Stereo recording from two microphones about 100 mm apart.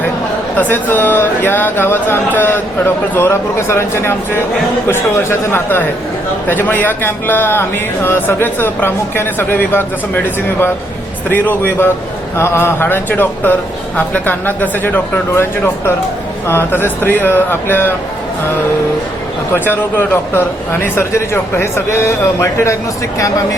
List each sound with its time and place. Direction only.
0.5 s speech: 20° left (ahead or behind)
19.5 s speech: 20° left (ahead or behind)